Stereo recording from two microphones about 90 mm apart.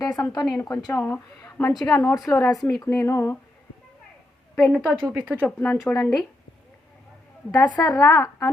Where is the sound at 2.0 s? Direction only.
35° left (ahead or behind).